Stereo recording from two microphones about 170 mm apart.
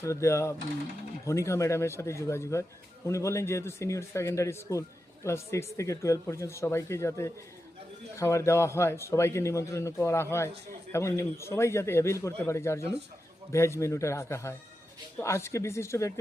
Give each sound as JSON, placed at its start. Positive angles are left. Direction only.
{"t": 0.0, "sound": "a man's voice", "side_deg": 15}